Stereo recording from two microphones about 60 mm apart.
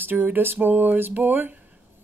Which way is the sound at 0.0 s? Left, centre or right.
Right.